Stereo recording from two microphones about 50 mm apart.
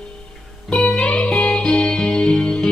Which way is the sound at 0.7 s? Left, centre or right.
Centre.